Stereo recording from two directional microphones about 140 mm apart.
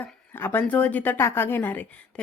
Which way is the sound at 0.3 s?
15° left (ahead or behind).